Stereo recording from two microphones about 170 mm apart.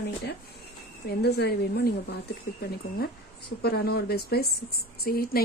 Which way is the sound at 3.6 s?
70° left (ahead or behind).